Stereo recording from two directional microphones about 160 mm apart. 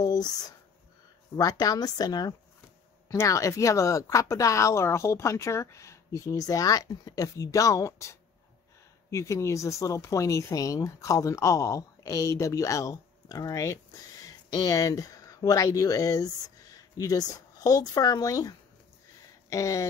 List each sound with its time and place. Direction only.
0.0 s speech: 25° left (ahead or behind)
19.5 s speech: 20° left (ahead or behind)